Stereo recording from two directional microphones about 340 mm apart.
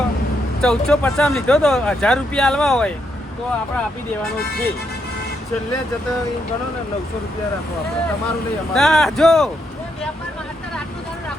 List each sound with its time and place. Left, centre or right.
0.6 s speech: centre
4.4 s speech: left
8.7 s speech: centre